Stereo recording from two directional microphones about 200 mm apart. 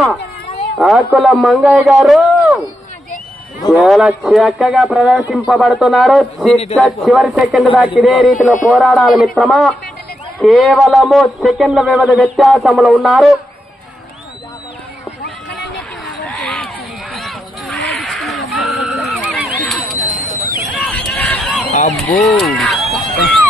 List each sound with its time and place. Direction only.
0.7 s speech: 5° right (ahead or behind)
3.7 s speech: 5° right (ahead or behind)
16.3 s a sound: 5° left (ahead or behind)
20.3 s hubbub: 15° left (ahead or behind)
21.0 s a sound: 5° left (ahead or behind)
22.1 s speech: centre (ahead or behind)